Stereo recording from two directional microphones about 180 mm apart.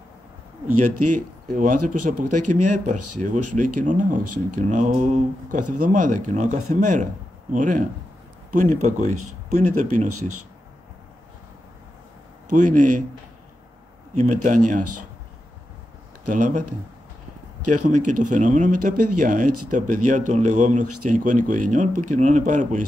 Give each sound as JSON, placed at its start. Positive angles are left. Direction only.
{"t": 1.6, "sound": "speech", "side_deg": -45}
{"t": 12.4, "sound": "speech", "side_deg": -45}
{"t": 14.1, "sound": "speech", "side_deg": -40}
{"t": 16.3, "sound": "speech", "side_deg": -45}
{"t": 17.8, "sound": "speech", "side_deg": -45}